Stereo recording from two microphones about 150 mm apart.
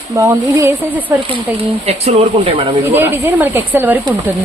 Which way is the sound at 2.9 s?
10° right (ahead or behind).